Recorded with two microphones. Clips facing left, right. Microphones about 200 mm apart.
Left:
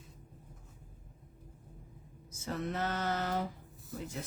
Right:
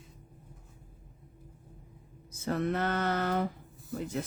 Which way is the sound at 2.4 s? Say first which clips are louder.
Right 6 dB; 60° right (ahead or behind).